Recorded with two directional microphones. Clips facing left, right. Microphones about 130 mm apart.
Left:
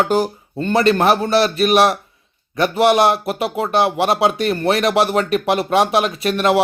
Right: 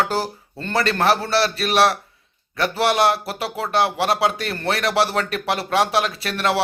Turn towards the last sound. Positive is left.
turn(degrees=20)  # may be behind; listen again after turning